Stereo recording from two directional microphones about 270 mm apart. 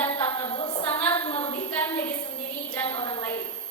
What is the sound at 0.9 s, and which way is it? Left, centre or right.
Female singing, centre.